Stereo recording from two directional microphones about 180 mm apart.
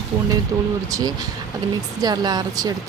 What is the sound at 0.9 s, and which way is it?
A woman's voice, 20° right (ahead or behind).